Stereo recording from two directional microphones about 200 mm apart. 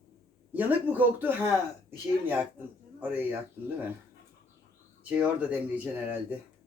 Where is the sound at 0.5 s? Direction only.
10° right (ahead or behind).